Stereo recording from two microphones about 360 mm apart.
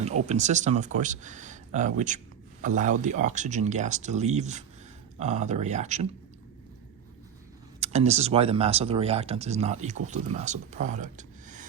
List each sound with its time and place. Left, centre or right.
0.0 s speech: centre
7.8 s speech: centre